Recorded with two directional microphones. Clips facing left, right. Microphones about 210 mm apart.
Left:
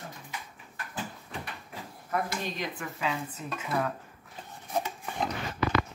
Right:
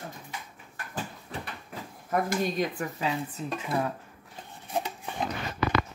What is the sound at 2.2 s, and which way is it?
Speech, 40° right (ahead or behind).